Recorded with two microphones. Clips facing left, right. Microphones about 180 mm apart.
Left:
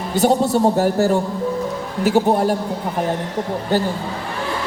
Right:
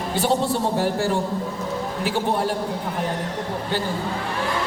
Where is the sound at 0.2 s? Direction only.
45° left (ahead or behind).